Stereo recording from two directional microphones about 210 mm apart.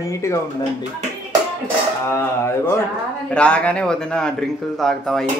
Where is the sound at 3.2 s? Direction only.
5° left (ahead or behind).